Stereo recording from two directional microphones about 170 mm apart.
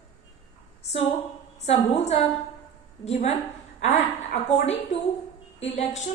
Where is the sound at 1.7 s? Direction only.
40° left (ahead or behind).